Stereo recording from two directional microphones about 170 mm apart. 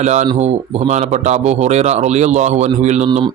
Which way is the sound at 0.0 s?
45° right (ahead or behind).